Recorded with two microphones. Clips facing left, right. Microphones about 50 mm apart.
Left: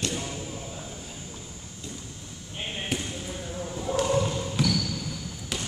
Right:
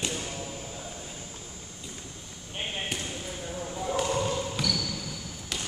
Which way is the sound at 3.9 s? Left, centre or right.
Centre.